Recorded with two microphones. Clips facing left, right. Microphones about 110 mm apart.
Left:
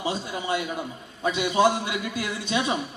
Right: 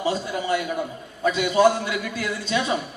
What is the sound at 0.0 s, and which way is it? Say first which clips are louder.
A man's voice: right 4 dB; 20° left (ahead or behind).